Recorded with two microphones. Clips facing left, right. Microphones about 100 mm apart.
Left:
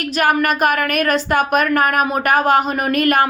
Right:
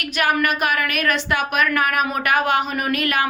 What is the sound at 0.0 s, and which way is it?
A woman's voice, 40° left (ahead or behind).